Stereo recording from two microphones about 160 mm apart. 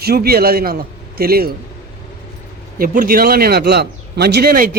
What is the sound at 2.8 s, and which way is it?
A man's voice, 60° right (ahead or behind).